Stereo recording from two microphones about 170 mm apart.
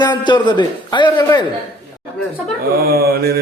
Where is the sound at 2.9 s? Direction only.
65° right (ahead or behind).